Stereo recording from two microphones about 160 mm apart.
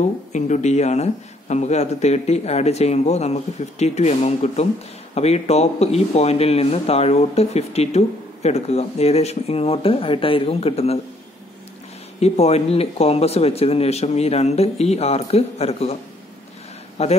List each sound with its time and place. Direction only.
0.0 s speech: 45° left (ahead or behind)
12.2 s speech: 40° left (ahead or behind)
17.0 s speech: 40° left (ahead or behind)